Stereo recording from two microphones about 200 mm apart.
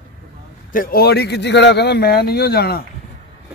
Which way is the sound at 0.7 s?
45° left (ahead or behind).